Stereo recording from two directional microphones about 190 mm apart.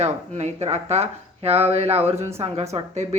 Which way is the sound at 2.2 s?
15° right (ahead or behind).